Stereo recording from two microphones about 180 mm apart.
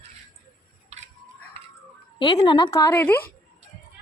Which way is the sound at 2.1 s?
25° left (ahead or behind).